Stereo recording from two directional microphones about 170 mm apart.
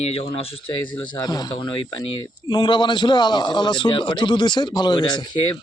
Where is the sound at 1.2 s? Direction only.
25° left (ahead or behind).